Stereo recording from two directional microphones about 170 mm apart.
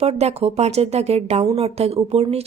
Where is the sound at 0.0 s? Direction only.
40° right (ahead or behind).